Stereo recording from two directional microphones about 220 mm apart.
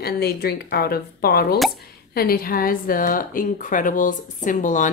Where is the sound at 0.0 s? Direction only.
45° left (ahead or behind).